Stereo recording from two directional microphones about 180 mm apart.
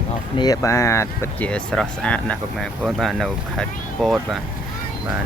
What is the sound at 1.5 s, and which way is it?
Speech, 5° left (ahead or behind).